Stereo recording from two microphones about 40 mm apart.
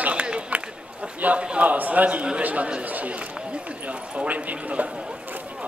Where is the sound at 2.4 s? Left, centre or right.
Right.